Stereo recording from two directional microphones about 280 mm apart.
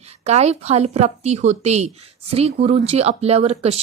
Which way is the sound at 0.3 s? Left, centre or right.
Right.